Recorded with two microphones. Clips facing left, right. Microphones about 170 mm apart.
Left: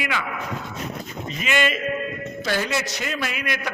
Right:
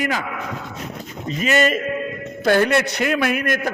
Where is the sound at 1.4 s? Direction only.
40° right (ahead or behind).